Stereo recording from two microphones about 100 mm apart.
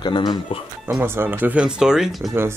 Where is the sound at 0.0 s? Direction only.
45° left (ahead or behind).